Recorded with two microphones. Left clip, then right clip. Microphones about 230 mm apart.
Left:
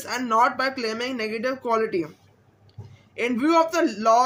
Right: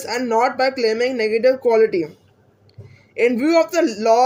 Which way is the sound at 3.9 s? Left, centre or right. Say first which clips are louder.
Right 4 dB; centre.